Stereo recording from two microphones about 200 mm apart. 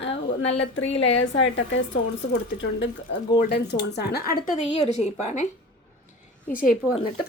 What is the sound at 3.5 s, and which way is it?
Speech, 55° left (ahead or behind).